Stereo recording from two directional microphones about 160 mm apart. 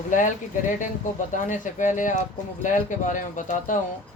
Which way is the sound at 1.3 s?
50° left (ahead or behind).